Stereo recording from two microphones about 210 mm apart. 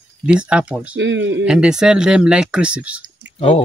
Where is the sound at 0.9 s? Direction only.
60° right (ahead or behind).